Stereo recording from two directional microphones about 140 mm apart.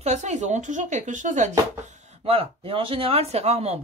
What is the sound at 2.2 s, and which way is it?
Speech, 45° right (ahead or behind).